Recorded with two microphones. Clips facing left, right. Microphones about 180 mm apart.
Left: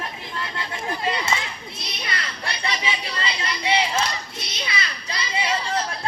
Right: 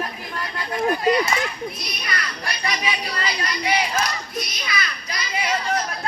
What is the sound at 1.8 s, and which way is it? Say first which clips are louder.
Children playing: right 2 dB; 25° left (ahead or behind).